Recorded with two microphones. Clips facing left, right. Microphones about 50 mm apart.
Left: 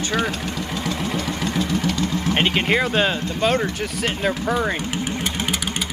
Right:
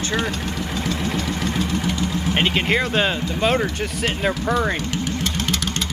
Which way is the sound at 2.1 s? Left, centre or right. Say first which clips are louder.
Right 1 dB; centre.